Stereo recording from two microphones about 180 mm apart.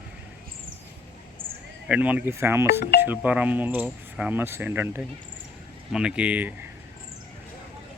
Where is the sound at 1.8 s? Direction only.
10° right (ahead or behind).